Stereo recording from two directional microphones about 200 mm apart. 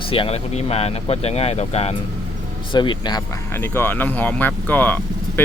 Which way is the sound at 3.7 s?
10° left (ahead or behind).